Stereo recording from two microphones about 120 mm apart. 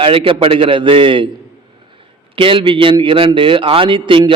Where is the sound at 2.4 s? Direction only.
45° right (ahead or behind).